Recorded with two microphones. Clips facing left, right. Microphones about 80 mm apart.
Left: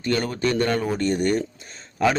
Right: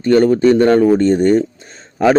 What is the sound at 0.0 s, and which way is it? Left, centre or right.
A man's voice, right.